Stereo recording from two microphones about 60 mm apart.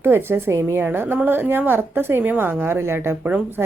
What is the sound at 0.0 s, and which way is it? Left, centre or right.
Speech, right.